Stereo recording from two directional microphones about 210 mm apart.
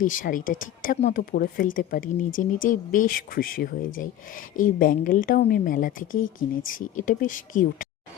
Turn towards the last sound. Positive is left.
turn(degrees=40)  # may be behind; listen again after turning